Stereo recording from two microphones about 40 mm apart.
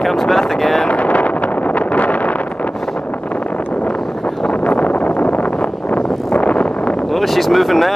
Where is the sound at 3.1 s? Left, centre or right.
Left.